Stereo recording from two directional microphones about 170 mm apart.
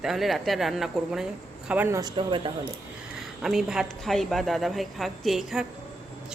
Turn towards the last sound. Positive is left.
turn(degrees=0)  # may be behind; listen again after turning